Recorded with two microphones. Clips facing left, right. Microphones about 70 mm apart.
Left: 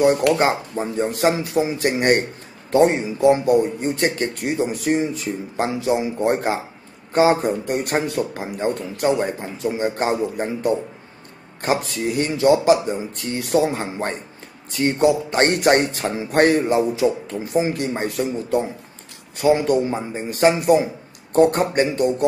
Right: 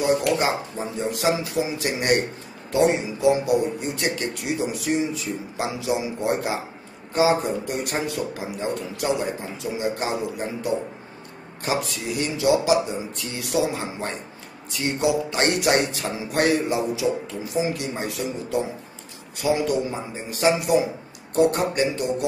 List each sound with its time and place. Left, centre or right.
0.0 s a man's voice: left